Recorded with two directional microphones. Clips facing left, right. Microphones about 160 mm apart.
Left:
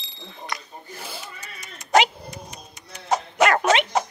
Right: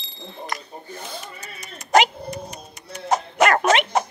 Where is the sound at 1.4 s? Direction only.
45° right (ahead or behind).